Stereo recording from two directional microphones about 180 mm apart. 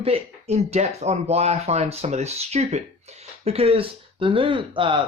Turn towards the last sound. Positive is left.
turn(degrees=-30)  # may be behind; listen again after turning